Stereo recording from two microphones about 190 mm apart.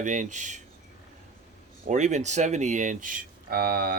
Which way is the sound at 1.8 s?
40° right (ahead or behind).